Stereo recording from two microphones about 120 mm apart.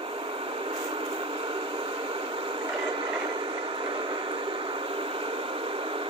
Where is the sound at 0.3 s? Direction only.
50° right (ahead or behind).